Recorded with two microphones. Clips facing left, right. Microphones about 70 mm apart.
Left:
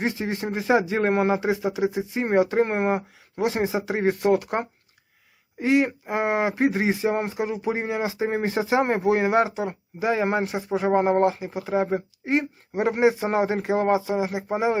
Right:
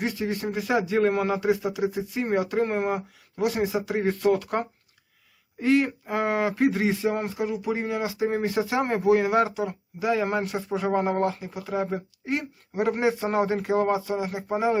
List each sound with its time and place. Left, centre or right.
0.0 s speech: left